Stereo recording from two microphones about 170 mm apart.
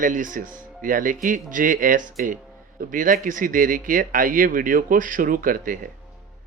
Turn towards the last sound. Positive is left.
turn(degrees=-55)  # may be behind; listen again after turning